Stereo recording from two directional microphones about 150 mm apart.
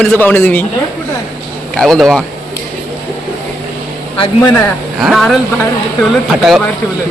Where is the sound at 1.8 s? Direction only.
Centre (ahead or behind).